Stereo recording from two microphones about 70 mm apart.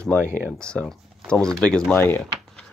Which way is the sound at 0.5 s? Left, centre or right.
Centre.